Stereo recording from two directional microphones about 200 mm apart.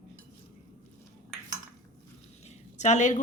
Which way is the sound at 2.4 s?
35° left (ahead or behind).